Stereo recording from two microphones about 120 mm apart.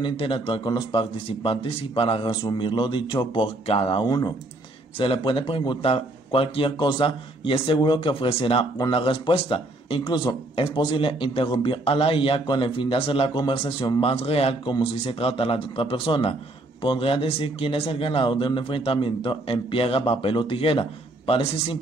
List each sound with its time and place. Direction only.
0.0 s speech: 45° left (ahead or behind)
3.6 s speech: 55° left (ahead or behind)
4.0 s speech: 35° left (ahead or behind)
4.9 s speech: 50° left (ahead or behind)
14.0 s speech: 55° left (ahead or behind)